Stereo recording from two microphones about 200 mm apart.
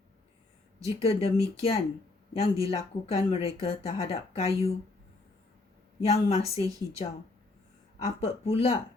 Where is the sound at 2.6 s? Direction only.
30° left (ahead or behind).